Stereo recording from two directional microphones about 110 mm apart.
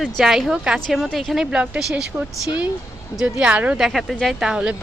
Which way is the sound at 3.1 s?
10° right (ahead or behind).